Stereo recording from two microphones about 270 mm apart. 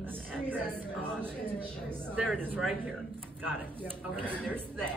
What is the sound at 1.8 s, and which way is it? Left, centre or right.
Speech, centre.